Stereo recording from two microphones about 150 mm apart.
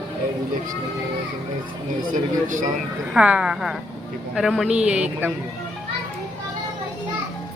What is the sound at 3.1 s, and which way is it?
A man's voice, 5° right (ahead or behind).